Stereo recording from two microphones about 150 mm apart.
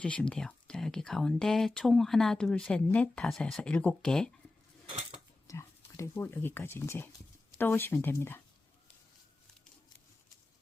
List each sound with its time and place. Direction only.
0.0 s speech: 10° left (ahead or behind)
5.5 s speech: 20° left (ahead or behind)